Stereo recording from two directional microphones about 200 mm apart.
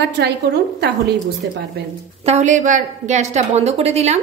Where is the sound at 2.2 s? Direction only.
35° right (ahead or behind).